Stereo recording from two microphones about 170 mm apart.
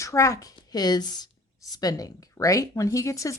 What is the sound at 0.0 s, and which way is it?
A woman's voice, 20° left (ahead or behind).